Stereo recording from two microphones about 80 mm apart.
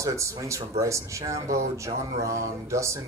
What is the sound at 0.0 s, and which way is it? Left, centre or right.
Speech, right.